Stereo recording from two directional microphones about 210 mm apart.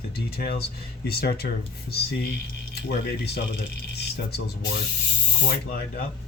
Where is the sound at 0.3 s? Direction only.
45° left (ahead or behind).